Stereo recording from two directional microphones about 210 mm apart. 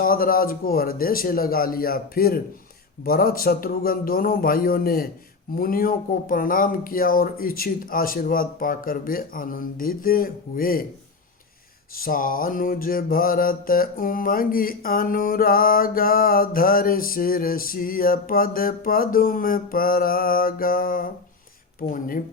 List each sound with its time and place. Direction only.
0.0 s mantra: 45° left (ahead or behind)
11.9 s mantra: 40° left (ahead or behind)
21.8 s speech: 40° left (ahead or behind)